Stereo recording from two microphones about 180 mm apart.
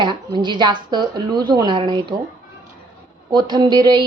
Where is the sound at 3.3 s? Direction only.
20° right (ahead or behind).